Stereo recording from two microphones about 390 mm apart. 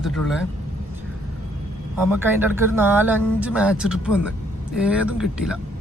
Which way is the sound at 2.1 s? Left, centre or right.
Centre.